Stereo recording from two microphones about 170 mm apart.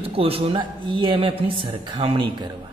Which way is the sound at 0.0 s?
35° right (ahead or behind).